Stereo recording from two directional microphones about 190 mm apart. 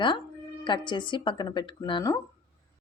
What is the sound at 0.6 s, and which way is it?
Speech, 25° left (ahead or behind).